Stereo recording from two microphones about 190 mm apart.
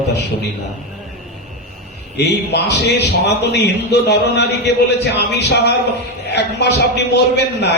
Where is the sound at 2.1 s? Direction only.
65° left (ahead or behind).